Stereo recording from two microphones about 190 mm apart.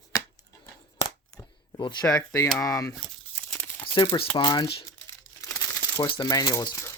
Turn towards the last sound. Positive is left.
turn(degrees=15)  # may be behind; listen again after turning